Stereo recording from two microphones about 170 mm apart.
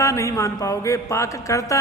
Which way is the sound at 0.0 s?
20° left (ahead or behind).